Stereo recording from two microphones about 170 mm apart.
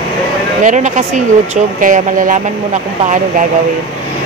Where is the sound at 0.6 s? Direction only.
45° right (ahead or behind).